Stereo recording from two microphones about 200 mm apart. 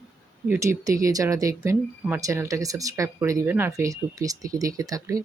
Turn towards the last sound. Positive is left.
turn(degrees=-15)  # may be behind; listen again after turning